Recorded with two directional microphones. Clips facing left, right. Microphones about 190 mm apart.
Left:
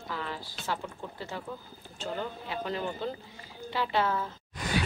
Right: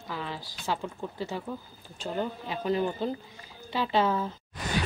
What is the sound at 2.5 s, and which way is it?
A woman's voice, 15° right (ahead or behind).